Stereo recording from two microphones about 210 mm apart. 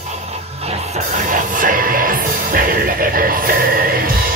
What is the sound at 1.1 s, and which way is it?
Music, 40° right (ahead or behind).